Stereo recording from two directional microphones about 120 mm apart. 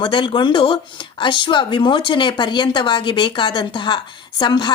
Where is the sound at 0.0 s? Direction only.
45° left (ahead or behind).